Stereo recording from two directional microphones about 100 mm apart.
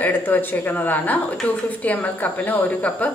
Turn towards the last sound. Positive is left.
turn(degrees=15)  # may be behind; listen again after turning